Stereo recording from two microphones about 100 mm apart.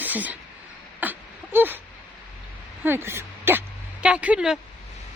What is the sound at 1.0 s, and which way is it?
Whimper, 20° right (ahead or behind).